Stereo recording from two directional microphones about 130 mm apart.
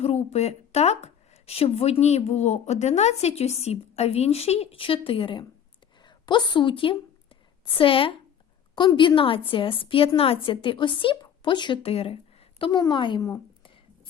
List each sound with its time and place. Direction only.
0.0 s a woman's voice: 55° left (ahead or behind); by 13.2 s 40° left (ahead or behind)